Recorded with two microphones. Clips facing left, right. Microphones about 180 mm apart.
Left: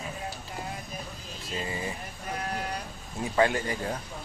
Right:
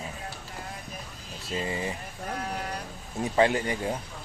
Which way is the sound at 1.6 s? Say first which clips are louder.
Right 3 dB; 25° right (ahead or behind).